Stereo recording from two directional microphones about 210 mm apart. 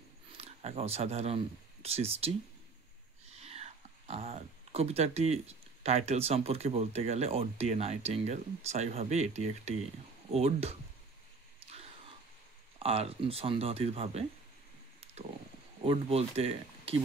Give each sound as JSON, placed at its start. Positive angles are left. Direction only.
{"t": 0.4, "sound": "speech", "side_deg": -30}
{"t": 3.3, "sound": "speech", "side_deg": -30}
{"t": 11.6, "sound": "a sound", "side_deg": -30}
{"t": 12.7, "sound": "speech", "side_deg": -30}
{"t": 15.8, "sound": "speech", "side_deg": -25}